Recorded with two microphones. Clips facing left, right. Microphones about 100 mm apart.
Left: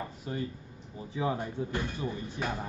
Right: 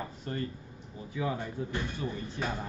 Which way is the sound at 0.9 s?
30° left (ahead or behind).